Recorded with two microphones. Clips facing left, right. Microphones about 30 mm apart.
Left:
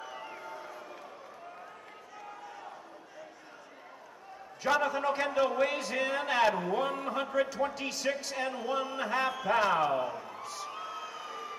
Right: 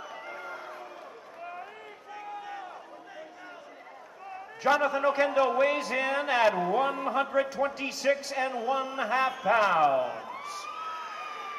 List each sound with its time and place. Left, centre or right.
4.6 s a man's voice: centre
11.1 s emergency vehicle: right